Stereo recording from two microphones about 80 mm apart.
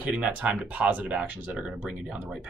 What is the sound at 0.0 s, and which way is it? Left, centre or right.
Speech, centre.